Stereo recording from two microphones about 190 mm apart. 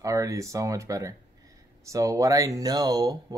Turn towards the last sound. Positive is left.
turn(degrees=-20)  # may be behind; listen again after turning